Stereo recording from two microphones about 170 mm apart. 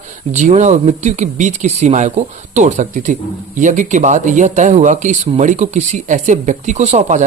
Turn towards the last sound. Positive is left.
turn(degrees=-45)  # may be behind; listen again after turning